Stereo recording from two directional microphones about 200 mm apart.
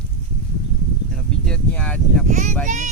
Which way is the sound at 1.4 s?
5° left (ahead or behind).